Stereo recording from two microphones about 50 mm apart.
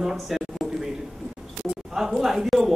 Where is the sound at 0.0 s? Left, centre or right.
Centre.